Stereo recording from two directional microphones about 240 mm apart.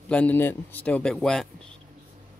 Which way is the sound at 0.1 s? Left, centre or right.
Centre.